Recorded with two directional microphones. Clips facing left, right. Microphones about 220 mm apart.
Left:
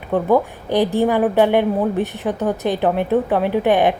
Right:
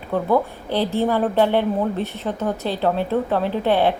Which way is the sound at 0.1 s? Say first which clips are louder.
Left 3 dB; 15° left (ahead or behind).